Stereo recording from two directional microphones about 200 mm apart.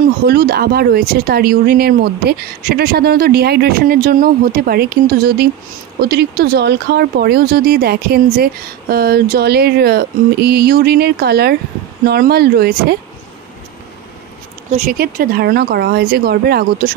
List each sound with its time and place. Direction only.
0.3 s speech: 50° right (ahead or behind)
14.7 s speech: 45° right (ahead or behind)